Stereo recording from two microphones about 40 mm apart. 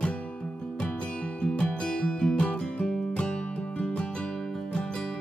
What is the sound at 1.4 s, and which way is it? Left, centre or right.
Music, left.